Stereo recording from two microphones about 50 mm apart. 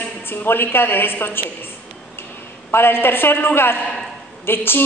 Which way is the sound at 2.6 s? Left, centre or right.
Left.